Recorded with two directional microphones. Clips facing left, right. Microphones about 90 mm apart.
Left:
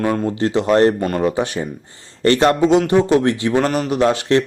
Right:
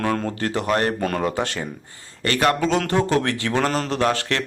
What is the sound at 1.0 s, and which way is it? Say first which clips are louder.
Speech: left 3 dB; 5° left (ahead or behind).